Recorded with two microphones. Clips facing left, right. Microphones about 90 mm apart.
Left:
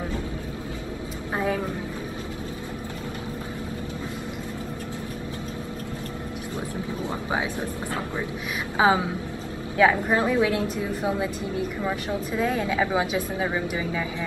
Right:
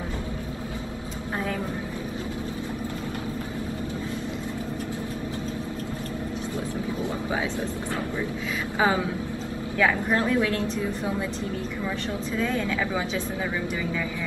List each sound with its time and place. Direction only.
8.7 s a woman's voice: 20° left (ahead or behind)
12.4 s a woman's voice: 15° left (ahead or behind)